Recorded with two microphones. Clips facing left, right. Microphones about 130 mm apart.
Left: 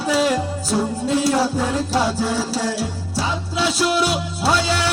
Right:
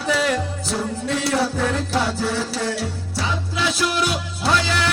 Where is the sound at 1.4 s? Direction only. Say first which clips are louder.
Left 2 dB; 25° left (ahead or behind).